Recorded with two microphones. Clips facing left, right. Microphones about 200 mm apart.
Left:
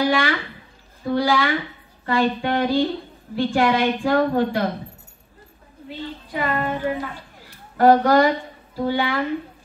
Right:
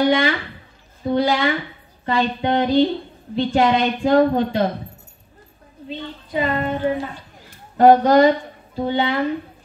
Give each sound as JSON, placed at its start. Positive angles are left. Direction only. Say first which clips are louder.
{"t": 0.0, "sound": "a woman's voice", "louder": "right 3 dB", "side_deg": -20}
{"t": 5.9, "sound": "a woman's voice", "louder": "right 1 dB", "side_deg": -20}